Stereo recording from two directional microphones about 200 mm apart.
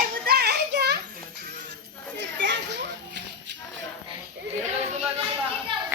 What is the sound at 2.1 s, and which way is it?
Children playing, 60° right (ahead or behind).